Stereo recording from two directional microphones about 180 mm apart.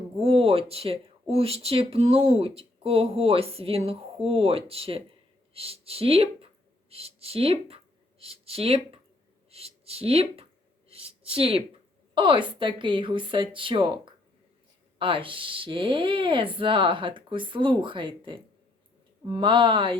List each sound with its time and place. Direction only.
0.2 s a woman's voice: 35° right (ahead or behind)
9.5 s a sound: 35° right (ahead or behind)
12.1 s speech: 25° right (ahead or behind)